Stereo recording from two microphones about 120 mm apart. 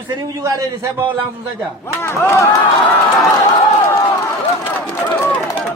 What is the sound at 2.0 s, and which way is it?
Speech, 20° left (ahead or behind).